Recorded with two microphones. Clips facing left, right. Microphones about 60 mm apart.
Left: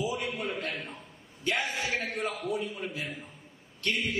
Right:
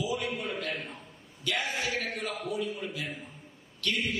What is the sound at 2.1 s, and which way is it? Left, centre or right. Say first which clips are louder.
Speech: left 2 dB; left.